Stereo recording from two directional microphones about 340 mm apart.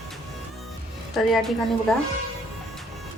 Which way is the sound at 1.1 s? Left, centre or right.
Centre.